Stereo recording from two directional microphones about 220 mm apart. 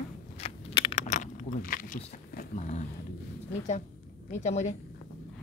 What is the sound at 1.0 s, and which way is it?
Keys jangling, 35° left (ahead or behind).